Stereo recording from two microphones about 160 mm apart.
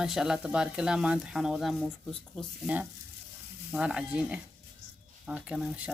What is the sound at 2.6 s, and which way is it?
Stir, 10° right (ahead or behind).